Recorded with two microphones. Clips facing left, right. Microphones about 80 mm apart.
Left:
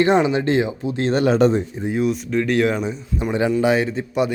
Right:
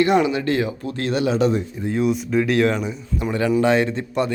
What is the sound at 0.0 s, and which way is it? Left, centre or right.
Speech, left.